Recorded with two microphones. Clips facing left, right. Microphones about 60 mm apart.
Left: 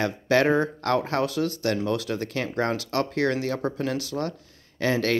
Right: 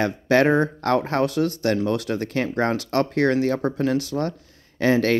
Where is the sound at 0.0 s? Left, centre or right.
Right.